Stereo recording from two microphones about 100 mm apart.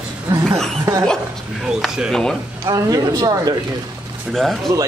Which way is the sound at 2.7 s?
35° right (ahead or behind).